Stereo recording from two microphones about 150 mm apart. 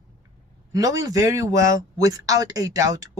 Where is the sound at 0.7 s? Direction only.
25° right (ahead or behind).